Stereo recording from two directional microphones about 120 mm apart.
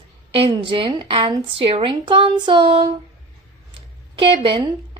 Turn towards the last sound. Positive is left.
turn(degrees=-45)  # may be behind; listen again after turning